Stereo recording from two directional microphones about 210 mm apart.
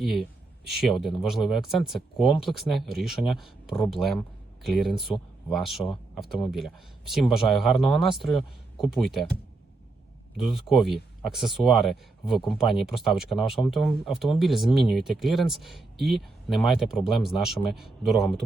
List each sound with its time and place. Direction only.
0.0 s speech: centre (ahead or behind)
10.3 s speech: centre (ahead or behind)